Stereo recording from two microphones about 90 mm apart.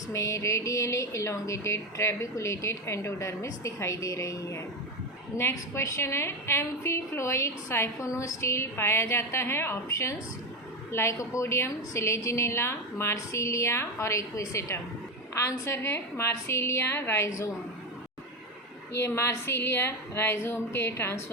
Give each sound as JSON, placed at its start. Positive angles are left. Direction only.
{"t": 0.1, "sound": "a woman's voice", "side_deg": 35}
{"t": 18.9, "sound": "a woman's voice", "side_deg": 30}